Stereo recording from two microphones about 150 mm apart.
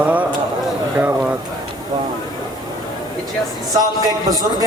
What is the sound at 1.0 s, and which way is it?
Speech, 10° right (ahead or behind).